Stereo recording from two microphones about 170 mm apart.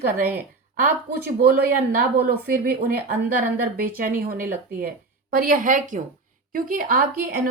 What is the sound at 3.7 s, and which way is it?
A woman's voice, 55° right (ahead or behind).